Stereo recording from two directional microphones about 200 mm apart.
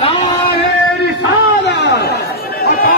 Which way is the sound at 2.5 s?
50° left (ahead or behind).